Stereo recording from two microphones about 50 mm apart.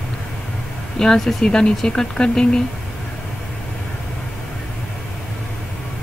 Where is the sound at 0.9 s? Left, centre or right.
Centre.